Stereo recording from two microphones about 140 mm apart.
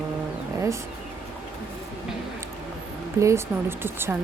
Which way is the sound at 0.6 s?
20° right (ahead or behind).